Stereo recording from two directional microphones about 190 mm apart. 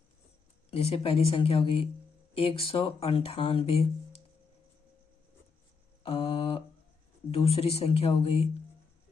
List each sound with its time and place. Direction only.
0.7 s speech: 30° left (ahead or behind)
6.0 s mantra: 30° left (ahead or behind)
7.3 s speech: 30° left (ahead or behind)